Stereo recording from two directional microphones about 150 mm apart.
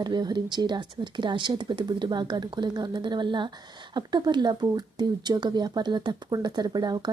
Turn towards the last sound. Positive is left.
turn(degrees=-25)  # may be behind; listen again after turning